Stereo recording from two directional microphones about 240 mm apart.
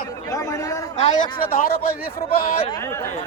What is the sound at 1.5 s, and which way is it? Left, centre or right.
Speech, left.